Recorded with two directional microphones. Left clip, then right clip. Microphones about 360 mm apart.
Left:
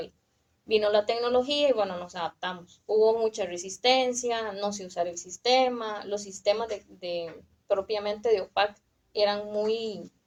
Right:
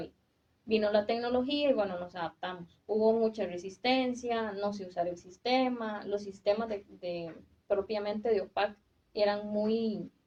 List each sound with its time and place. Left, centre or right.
0.7 s speech: left